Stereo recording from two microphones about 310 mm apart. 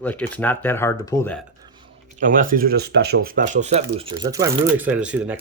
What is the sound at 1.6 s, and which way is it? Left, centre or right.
Chewing, centre.